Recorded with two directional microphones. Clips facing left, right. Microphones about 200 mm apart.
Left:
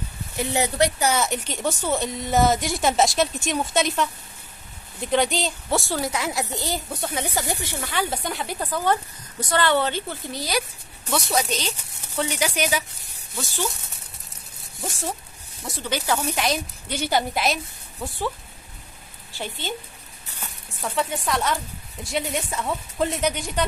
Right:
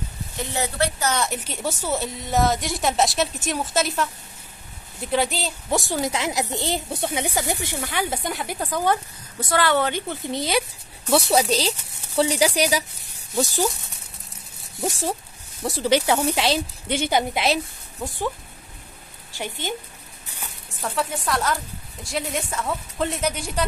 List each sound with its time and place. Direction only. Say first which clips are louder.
0.4 s speech: left 3 dB; 15° left (ahead or behind)
1.2 s a woman's voice: left 1 dB; 5° right (ahead or behind)
5.1 s a woman's voice: left 2 dB; 5° right (ahead or behind)
5.7 s a woman's voice: right 3 dB; 15° right (ahead or behind)
7.1 s a woman's voice: right 1 dB; 15° right (ahead or behind); by 13.7 s 40° right (ahead or behind)
14.9 s a woman's voice: right 4 dB; 35° right (ahead or behind); by 18.3 s 15° right (ahead or behind)
19.3 s speech: right 2 dB; 15° right (ahead or behind)
20.8 s a woman's voice: even; centre (ahead or behind)